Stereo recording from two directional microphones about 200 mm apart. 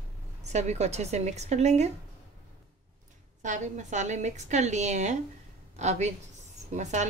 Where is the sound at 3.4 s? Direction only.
35° right (ahead or behind).